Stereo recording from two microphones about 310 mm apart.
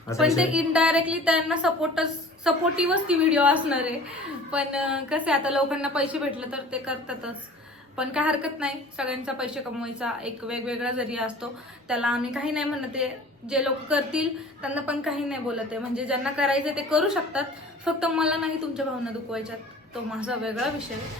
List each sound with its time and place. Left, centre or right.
0.2 s a woman's voice: centre